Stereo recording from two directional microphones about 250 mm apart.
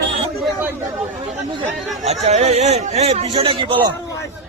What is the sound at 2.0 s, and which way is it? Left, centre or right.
Speech, right.